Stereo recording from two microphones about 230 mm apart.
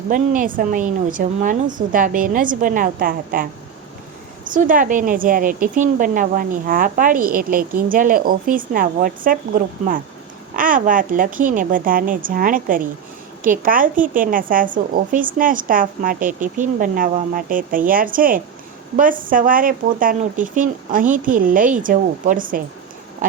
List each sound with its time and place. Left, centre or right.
0.1 s speech: right
4.5 s speech: right